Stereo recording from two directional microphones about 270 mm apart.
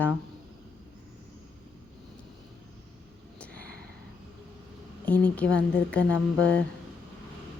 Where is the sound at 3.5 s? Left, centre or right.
Right.